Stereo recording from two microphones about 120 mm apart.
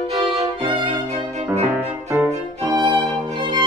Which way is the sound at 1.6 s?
15° right (ahead or behind).